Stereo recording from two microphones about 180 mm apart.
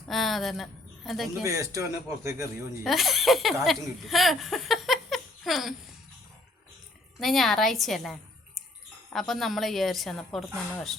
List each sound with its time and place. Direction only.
0.1 s a woman's voice: centre (ahead or behind)
1.5 s speech: 15° right (ahead or behind)
2.8 s speech: centre (ahead or behind)
7.2 s a woman's voice: centre (ahead or behind)
9.1 s a woman's voice: centre (ahead or behind)